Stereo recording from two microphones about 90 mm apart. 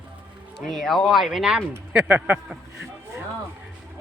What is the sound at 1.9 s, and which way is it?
Speech, 15° right (ahead or behind).